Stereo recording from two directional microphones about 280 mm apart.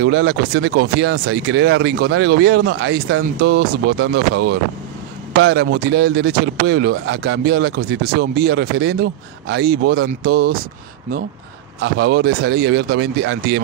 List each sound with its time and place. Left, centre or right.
0.0 s speech: right
3.3 s speech: right
11.8 s speech: right